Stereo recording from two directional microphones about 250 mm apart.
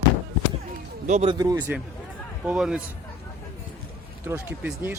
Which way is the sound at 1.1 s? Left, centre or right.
Right.